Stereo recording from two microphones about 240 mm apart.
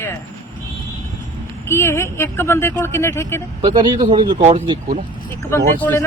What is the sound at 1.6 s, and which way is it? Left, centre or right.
A man's voice, centre.